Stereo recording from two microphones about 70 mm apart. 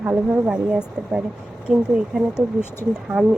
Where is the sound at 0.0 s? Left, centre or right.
Centre.